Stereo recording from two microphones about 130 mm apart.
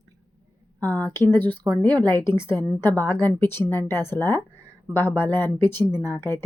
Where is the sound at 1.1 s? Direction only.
20° left (ahead or behind).